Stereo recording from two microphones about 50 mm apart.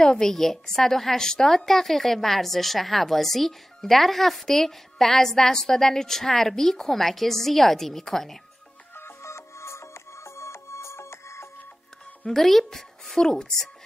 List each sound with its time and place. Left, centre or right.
0.0 s a woman's voice: centre
8.9 s music: left
12.3 s speech: centre